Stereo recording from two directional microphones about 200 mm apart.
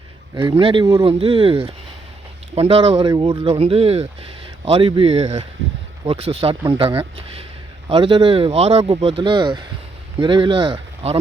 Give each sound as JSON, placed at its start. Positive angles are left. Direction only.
{"t": 0.3, "sound": "speech", "side_deg": -10}
{"t": 0.6, "sound": "speech", "side_deg": -25}